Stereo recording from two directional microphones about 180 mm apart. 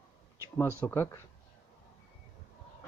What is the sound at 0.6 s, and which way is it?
Speech, 15° left (ahead or behind).